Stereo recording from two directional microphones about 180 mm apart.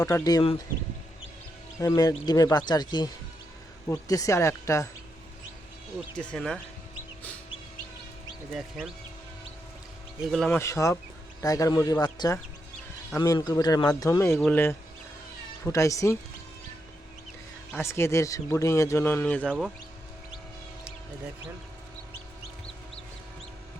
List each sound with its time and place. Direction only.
0.0 s speech: 20° left (ahead or behind)
1.8 s speech: 20° left (ahead or behind)
6.1 s speech: 5° left (ahead or behind)
8.5 s speech: centre (ahead or behind)
10.3 s speech: 5° left (ahead or behind)
10.6 s speech: 15° left (ahead or behind)
17.8 s speech: 15° left (ahead or behind)